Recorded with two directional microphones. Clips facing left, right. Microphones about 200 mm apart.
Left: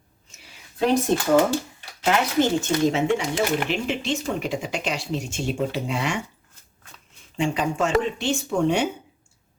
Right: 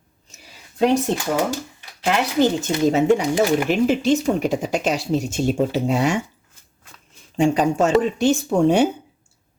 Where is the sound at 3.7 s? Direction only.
40° right (ahead or behind).